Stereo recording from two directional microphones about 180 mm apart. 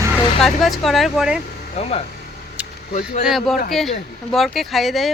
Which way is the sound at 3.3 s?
Centre (ahead or behind).